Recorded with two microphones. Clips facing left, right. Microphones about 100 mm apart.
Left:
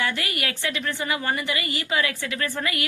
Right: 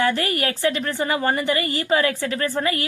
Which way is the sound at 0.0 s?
35° right (ahead or behind).